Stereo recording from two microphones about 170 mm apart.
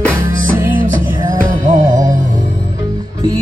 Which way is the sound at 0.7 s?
55° right (ahead or behind).